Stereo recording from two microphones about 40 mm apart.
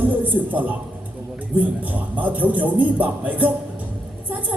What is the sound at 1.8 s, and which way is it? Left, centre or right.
Music, right.